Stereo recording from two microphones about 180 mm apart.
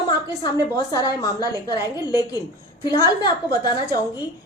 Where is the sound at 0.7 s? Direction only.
20° left (ahead or behind).